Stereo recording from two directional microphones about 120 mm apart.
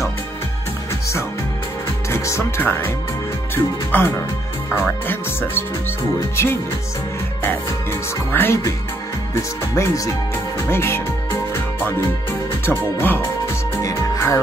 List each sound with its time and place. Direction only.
2.0 s speech: 25° left (ahead or behind)
8.3 s speech: 20° left (ahead or behind)
12.3 s speech: 20° left (ahead or behind)
13.8 s music: 25° left (ahead or behind)